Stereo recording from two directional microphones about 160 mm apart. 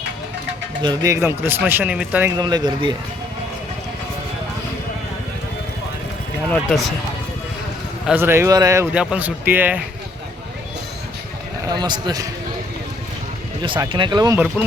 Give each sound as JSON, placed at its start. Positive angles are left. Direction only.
{"t": 0.8, "sound": "speech", "side_deg": -25}
{"t": 2.4, "sound": "speech", "side_deg": -25}
{"t": 6.5, "sound": "speech", "side_deg": 0}
{"t": 8.0, "sound": "speech", "side_deg": -15}
{"t": 8.9, "sound": "speech", "side_deg": -5}
{"t": 11.6, "sound": "speech", "side_deg": -25}
{"t": 13.6, "sound": "speech", "side_deg": -30}